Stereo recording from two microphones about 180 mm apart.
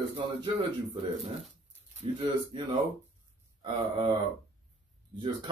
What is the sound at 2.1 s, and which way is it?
Mantra, 25° right (ahead or behind).